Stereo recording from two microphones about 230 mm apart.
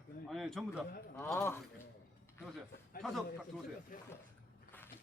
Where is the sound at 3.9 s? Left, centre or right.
Left.